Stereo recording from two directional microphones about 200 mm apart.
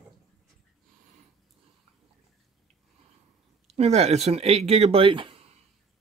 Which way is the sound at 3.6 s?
30° right (ahead or behind).